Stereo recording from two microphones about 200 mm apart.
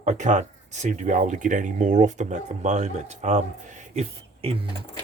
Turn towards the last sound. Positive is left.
turn(degrees=-30)  # may be behind; listen again after turning